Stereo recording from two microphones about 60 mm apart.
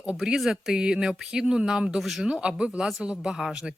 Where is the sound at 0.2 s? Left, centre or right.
Centre.